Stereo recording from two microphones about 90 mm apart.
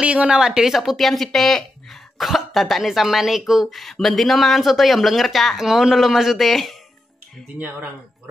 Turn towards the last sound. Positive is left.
turn(degrees=-20)  # may be behind; listen again after turning